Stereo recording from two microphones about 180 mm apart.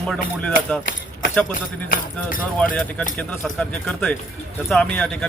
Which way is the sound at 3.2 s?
5° left (ahead or behind).